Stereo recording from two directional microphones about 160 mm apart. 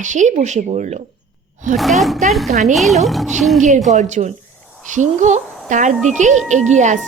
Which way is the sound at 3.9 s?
50° right (ahead or behind).